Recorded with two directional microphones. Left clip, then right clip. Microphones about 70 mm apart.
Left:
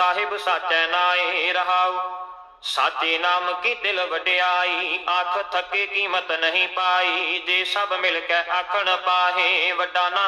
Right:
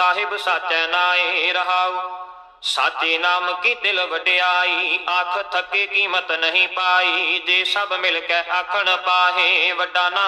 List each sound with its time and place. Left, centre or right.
0.0 s a man's voice: right